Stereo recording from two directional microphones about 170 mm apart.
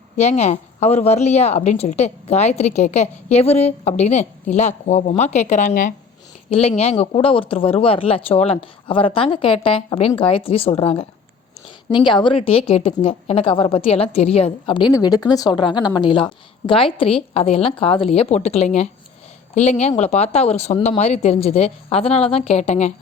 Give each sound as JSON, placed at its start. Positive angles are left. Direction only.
{"t": 0.2, "sound": "a woman's voice", "side_deg": 40}
{"t": 6.5, "sound": "a woman's voice", "side_deg": 35}